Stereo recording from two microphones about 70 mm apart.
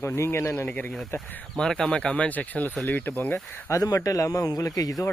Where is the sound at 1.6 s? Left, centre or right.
Centre; by 3.4 s left.